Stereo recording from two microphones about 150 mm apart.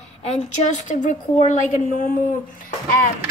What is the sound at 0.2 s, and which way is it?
A woman's voice, 50° left (ahead or behind).